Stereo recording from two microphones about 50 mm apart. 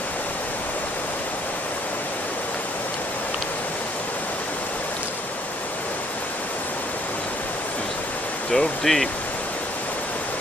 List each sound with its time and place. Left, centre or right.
8.5 s speech: centre